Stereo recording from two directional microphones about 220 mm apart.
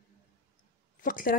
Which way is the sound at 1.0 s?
40° left (ahead or behind).